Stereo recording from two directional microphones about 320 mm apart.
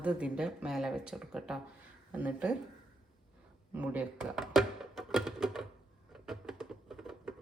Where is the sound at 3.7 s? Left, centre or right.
Centre.